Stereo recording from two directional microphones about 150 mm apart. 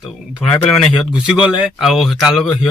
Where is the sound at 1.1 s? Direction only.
5° right (ahead or behind).